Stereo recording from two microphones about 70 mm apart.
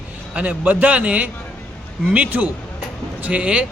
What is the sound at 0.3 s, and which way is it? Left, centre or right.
A man's voice, right.